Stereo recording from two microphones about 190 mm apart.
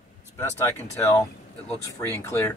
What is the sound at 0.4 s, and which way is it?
Speech, 15° left (ahead or behind).